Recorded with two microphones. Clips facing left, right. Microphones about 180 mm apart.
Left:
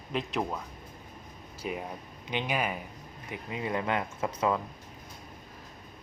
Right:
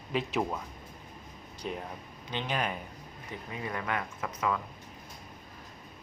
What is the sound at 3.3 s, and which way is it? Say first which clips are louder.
Speech: left 5 dB; 20° left (ahead or behind).